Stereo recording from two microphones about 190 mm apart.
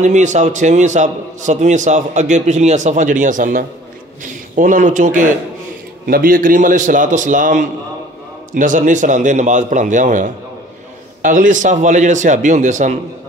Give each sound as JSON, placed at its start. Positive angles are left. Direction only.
{"t": 0.0, "sound": "a man's voice", "side_deg": -40}